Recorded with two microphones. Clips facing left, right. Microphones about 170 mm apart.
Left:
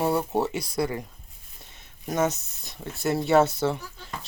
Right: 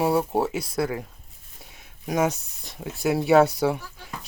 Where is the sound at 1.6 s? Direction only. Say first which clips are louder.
Right 1 dB; 5° right (ahead or behind).